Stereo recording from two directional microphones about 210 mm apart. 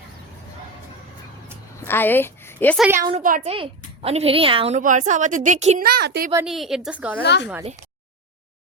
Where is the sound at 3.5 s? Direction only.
25° right (ahead or behind).